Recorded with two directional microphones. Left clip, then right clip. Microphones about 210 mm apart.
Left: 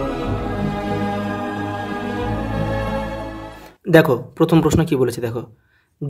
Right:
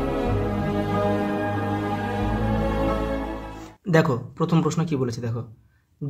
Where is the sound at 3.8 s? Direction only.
30° left (ahead or behind).